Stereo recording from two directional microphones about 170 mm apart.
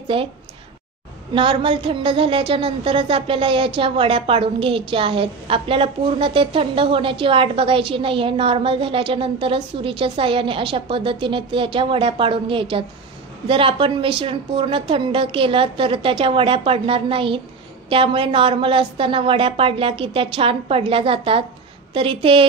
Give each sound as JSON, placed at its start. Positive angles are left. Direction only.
{"t": 0.1, "sound": "a woman's voice", "side_deg": -30}
{"t": 1.3, "sound": "a woman's voice", "side_deg": -30}